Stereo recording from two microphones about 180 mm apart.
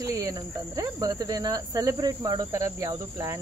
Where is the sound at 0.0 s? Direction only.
20° right (ahead or behind).